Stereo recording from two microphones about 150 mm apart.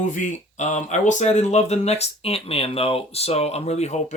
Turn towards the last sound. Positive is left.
turn(degrees=50)  # may be behind; listen again after turning